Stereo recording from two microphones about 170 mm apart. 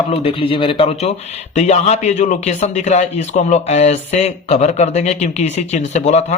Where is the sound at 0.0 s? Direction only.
35° left (ahead or behind).